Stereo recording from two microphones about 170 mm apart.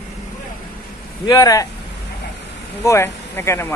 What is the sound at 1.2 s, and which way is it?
Speech, 20° left (ahead or behind).